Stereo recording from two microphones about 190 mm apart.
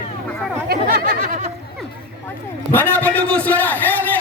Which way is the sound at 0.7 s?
50° right (ahead or behind).